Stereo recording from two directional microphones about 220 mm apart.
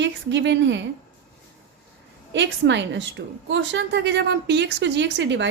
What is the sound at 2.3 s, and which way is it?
A woman's voice, 55° right (ahead or behind).